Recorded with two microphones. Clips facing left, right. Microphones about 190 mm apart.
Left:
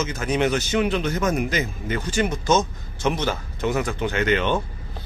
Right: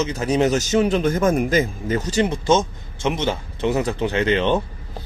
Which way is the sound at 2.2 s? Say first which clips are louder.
Right 1 dB; 30° right (ahead or behind).